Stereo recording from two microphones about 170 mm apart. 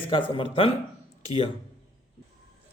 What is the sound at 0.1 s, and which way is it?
Speech, 30° left (ahead or behind).